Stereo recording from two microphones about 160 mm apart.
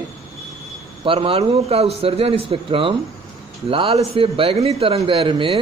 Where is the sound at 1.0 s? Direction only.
35° right (ahead or behind).